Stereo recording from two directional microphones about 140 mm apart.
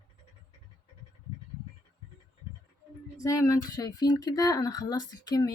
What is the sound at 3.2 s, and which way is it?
Speech, 25° left (ahead or behind).